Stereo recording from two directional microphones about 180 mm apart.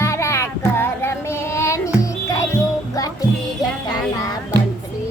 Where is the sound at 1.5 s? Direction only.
15° left (ahead or behind).